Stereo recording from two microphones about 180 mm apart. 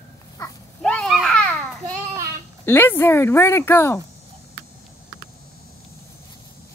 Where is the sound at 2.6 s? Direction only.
10° left (ahead or behind).